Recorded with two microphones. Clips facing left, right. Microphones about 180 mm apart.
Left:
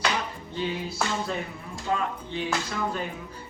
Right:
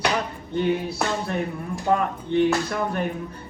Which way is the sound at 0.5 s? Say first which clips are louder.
Right 7 dB; 60° right (ahead or behind).